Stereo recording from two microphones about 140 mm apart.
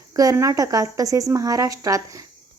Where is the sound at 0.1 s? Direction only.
25° right (ahead or behind).